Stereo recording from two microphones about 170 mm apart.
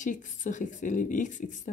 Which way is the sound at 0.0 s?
50° left (ahead or behind).